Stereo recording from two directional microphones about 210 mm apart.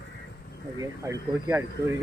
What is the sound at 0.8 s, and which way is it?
Speech, 10° right (ahead or behind).